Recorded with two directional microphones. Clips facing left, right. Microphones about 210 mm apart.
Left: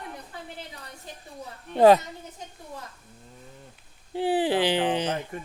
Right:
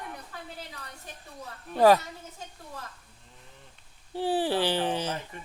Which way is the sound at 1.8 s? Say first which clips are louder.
Left 3 dB; 20° left (ahead or behind).